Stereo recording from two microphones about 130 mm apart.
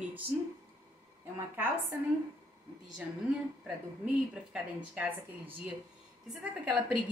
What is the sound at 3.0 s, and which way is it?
A woman's voice, 5° right (ahead or behind).